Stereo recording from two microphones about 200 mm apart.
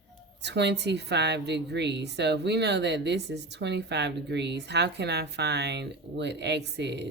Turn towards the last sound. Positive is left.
turn(degrees=-60)  # may be behind; listen again after turning